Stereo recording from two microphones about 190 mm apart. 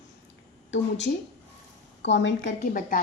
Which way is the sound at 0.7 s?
70° left (ahead or behind).